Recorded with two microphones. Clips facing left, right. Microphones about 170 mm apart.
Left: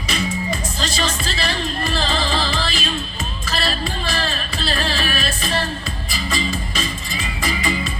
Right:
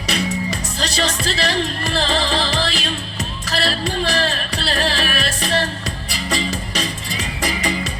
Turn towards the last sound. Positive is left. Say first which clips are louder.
# right 1 dB
turn(degrees=-75)  # may be behind; listen again after turning